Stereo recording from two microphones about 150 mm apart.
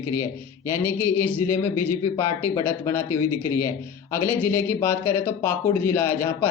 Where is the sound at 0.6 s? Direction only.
15° left (ahead or behind).